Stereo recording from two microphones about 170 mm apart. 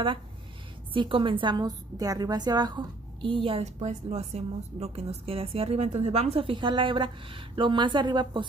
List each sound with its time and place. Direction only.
0.9 s a woman's voice: 30° right (ahead or behind)